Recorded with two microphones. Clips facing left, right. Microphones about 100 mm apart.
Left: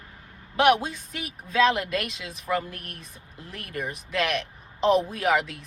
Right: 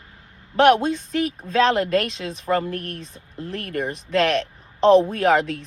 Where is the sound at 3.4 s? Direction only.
60° right (ahead or behind).